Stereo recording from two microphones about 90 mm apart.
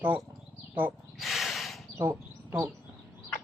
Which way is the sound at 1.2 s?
Centre (ahead or behind).